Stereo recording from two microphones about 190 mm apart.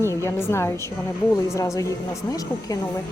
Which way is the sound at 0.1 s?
15° left (ahead or behind).